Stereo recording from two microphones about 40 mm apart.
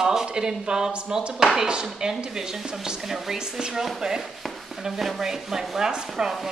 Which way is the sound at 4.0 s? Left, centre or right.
Centre.